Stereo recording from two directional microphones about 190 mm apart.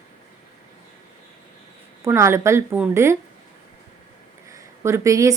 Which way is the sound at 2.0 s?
15° right (ahead or behind).